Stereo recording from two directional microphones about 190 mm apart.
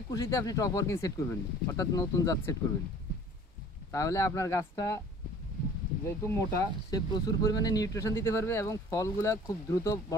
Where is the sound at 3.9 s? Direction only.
15° left (ahead or behind).